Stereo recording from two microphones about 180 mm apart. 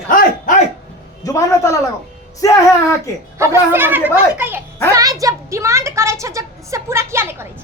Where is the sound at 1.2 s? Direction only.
20° left (ahead or behind).